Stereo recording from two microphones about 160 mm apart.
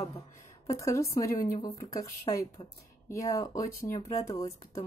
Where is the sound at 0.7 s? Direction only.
20° left (ahead or behind).